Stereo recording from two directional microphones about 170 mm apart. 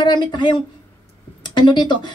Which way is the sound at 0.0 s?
25° left (ahead or behind).